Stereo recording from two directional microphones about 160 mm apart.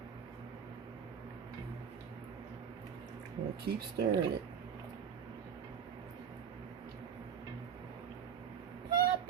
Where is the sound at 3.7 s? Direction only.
85° right.